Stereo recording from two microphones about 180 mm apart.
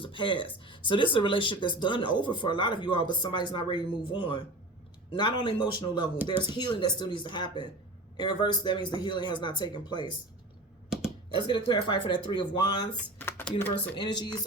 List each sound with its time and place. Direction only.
0.0 s speech: 25° left (ahead or behind)
11.3 s speech: 25° left (ahead or behind)
13.1 s a sound: 10° left (ahead or behind)
13.9 s speech: 25° left (ahead or behind)